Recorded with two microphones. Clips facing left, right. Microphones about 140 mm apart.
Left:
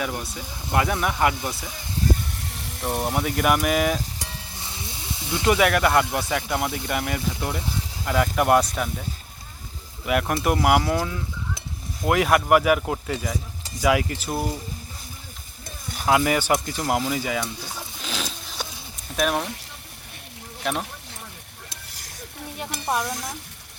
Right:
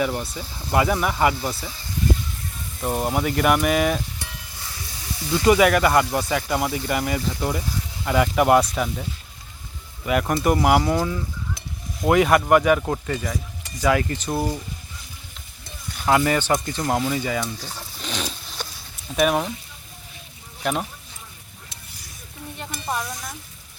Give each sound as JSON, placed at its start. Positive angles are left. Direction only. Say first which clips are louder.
{"t": 0.0, "sound": "speech", "louder": "right 4 dB", "side_deg": 0}
{"t": 2.3, "sound": "a sound", "louder": "even", "side_deg": 75}
{"t": 2.9, "sound": "speech", "louder": "right 2 dB", "side_deg": -10}
{"t": 4.6, "sound": "snake", "louder": "even", "side_deg": 25}
{"t": 5.5, "sound": "speech", "louder": "right 3 dB", "side_deg": 0}
{"t": 10.1, "sound": "speech", "louder": "right 2 dB", "side_deg": 0}
{"t": 16.0, "sound": "speech", "louder": "right 1 dB", "side_deg": 5}
{"t": 17.1, "sound": "a sound", "louder": "right 1 dB", "side_deg": 5}
{"t": 19.1, "sound": "speech", "louder": "right 4 dB", "side_deg": -5}
{"t": 22.5, "sound": "stir", "louder": "left 2 dB", "side_deg": 10}